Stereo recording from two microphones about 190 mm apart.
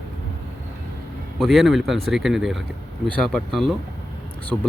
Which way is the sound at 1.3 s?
Centre (ahead or behind).